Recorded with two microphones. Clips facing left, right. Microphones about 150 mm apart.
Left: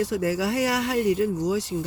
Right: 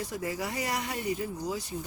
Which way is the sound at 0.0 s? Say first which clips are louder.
Left 9 dB; 85° left.